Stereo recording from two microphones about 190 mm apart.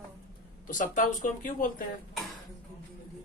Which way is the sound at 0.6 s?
45° left (ahead or behind).